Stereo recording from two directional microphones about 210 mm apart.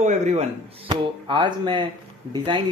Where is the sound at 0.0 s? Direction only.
35° right (ahead or behind).